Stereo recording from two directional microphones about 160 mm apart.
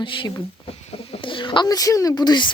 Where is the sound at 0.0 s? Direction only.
30° left (ahead or behind).